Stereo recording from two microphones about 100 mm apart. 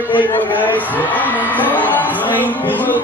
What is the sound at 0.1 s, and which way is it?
Speech, 15° left (ahead or behind).